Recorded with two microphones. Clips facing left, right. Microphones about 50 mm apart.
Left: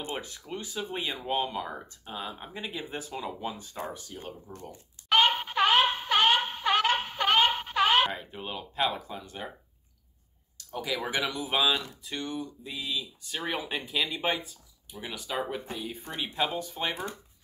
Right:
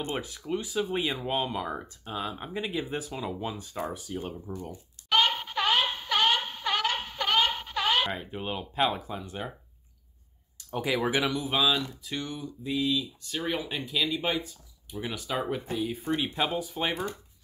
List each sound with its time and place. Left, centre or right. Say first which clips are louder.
0.1 s speech: right 4 dB; centre
3.9 s speech: right 6 dB; centre
4.5 s speech: right 7 dB; right
5.1 s a sound: left 2 dB; centre
8.1 s speech: right 3 dB; centre
10.7 s speech: right 4 dB; right
11.1 s speech: right 3 dB; centre
11.6 s speech: right 1 dB; centre
12.0 s speech: even; centre